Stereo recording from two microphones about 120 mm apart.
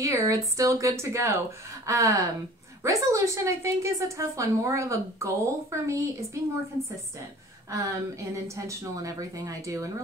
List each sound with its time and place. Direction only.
0.0 s a woman's voice: 25° right (ahead or behind)
7.7 s a woman's voice: 25° right (ahead or behind)